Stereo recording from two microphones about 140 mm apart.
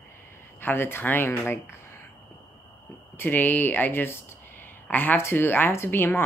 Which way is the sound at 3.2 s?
15° left (ahead or behind).